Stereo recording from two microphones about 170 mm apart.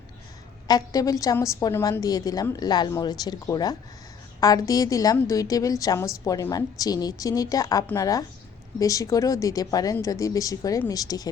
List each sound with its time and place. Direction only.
0.7 s a woman's voice: 20° left (ahead or behind)